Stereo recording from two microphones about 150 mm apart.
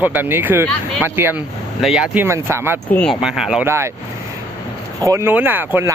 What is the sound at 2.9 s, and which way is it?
Speech, 10° left (ahead or behind).